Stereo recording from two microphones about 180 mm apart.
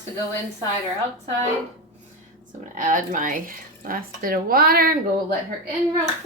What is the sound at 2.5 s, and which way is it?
A woman's voice, 45° right (ahead or behind).